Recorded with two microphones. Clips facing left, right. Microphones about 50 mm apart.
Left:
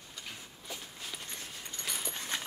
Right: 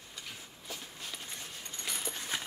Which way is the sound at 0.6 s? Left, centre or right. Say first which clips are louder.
Even; centre.